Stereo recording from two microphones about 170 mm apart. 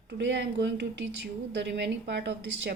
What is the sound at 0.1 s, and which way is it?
A woman's voice, 90° right.